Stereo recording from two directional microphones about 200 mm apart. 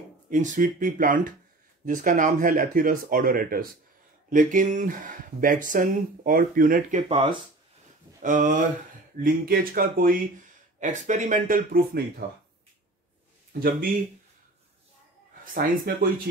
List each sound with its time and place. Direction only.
0.3 s speech: 40° right (ahead or behind)
7.1 s speech: 25° right (ahead or behind)
8.2 s speech: 40° right (ahead or behind)
13.5 s speech: 45° right (ahead or behind)
15.5 s speech: 45° right (ahead or behind)